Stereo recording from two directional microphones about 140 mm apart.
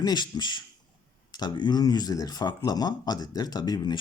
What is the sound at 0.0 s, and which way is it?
Speech, 30° left (ahead or behind).